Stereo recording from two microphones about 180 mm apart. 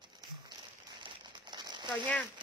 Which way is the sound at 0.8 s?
25° right (ahead or behind).